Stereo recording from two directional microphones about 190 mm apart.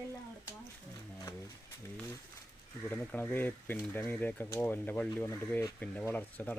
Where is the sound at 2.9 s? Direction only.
10° left (ahead or behind).